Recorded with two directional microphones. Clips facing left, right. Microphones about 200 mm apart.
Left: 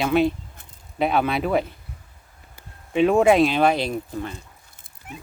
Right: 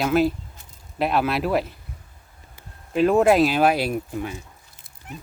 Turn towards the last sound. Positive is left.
turn(degrees=-10)  # may be behind; listen again after turning